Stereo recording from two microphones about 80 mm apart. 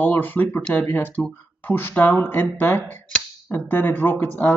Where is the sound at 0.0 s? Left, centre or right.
Left.